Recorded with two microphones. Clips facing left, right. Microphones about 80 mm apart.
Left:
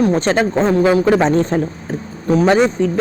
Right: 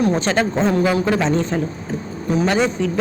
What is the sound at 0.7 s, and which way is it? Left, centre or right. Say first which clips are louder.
Speech: left 5 dB; left.